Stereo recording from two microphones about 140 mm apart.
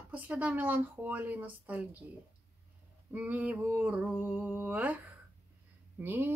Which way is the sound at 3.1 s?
10° right (ahead or behind).